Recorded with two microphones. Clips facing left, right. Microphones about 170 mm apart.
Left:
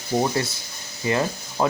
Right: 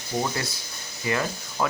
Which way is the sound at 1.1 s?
25° left (ahead or behind).